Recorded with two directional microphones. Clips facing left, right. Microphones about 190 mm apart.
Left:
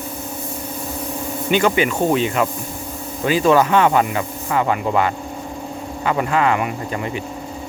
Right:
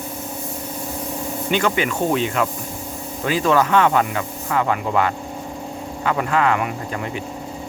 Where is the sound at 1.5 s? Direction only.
10° left (ahead or behind).